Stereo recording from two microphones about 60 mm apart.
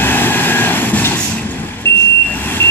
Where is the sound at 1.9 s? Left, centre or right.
Left.